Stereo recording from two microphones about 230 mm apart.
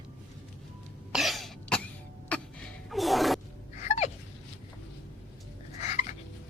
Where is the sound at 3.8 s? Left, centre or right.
Left.